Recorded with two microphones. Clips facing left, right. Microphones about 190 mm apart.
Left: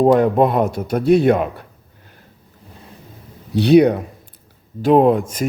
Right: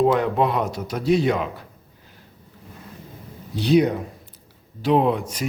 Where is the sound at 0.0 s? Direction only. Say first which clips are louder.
Left 6 dB; 45° left (ahead or behind).